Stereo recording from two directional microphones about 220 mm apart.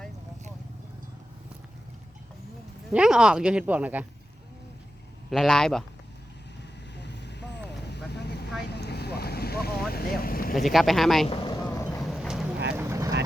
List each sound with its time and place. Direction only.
2.9 s speech: 5° right (ahead or behind)
5.3 s speech: centre (ahead or behind)
6.9 s vehicle: 50° left (ahead or behind)
10.5 s speech: centre (ahead or behind)
11.3 s vehicle: 20° left (ahead or behind)
11.6 s boat: 10° left (ahead or behind)
12.0 s vehicle: centre (ahead or behind)
12.7 s vehicle: 10° right (ahead or behind)